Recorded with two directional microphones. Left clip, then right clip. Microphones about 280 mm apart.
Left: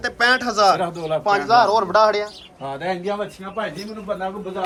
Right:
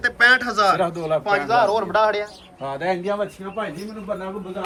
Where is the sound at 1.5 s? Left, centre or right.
Centre.